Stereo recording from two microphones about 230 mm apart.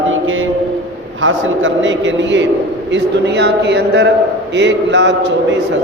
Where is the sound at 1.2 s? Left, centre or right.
Right.